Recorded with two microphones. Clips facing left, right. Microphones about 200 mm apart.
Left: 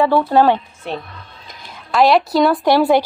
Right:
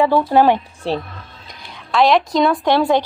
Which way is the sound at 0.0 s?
15° right (ahead or behind).